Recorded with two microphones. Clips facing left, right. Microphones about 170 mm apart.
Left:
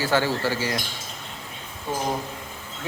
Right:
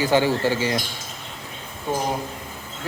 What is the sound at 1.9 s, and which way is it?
Speech, 15° right (ahead or behind).